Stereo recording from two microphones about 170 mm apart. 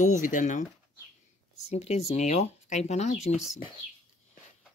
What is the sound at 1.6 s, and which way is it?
Speech, 40° left (ahead or behind).